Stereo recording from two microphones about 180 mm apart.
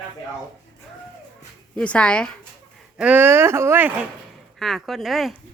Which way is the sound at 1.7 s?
5° left (ahead or behind).